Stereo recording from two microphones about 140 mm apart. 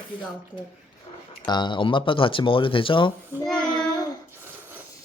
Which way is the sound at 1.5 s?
35° left (ahead or behind).